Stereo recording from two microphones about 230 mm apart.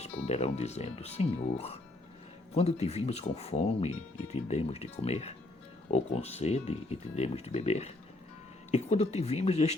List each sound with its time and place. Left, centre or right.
0.3 s speech: left